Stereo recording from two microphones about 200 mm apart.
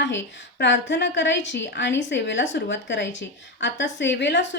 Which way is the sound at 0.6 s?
60° left (ahead or behind).